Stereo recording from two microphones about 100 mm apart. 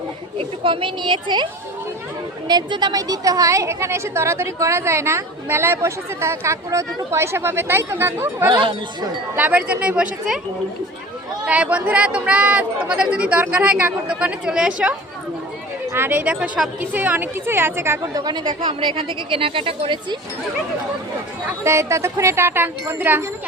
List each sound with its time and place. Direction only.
0.3 s a woman's voice: 60° right (ahead or behind)
2.5 s a woman's voice: 45° right (ahead or behind); by 8.4 s 25° right (ahead or behind)
8.4 s speech: 50° right (ahead or behind)
9.3 s speech: 15° right (ahead or behind)
11.4 s speech: 15° right (ahead or behind)
15.9 s a woman's voice: 20° right (ahead or behind)
18.0 s speech: 40° right (ahead or behind); by 20.0 s 65° right (ahead or behind)
21.6 s a woman's voice: 30° right (ahead or behind)